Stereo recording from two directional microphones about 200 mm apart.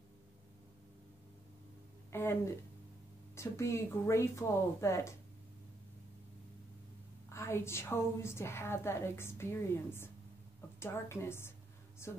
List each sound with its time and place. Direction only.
2.1 s a woman's voice: 10° left (ahead or behind)
7.2 s a woman's voice: 15° left (ahead or behind)